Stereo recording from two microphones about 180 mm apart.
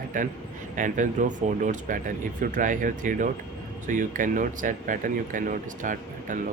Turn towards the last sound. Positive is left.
turn(degrees=-50)  # may be behind; listen again after turning